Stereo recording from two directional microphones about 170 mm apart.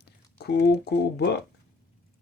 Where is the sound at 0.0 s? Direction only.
75° left (ahead or behind).